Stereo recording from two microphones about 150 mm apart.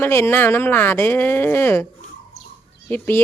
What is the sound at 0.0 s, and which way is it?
Speech, 15° left (ahead or behind).